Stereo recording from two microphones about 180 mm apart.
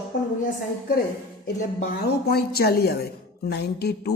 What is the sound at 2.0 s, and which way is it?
Speech, 60° left (ahead or behind).